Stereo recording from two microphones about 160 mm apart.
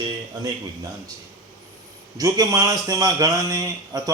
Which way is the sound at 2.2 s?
20° right (ahead or behind).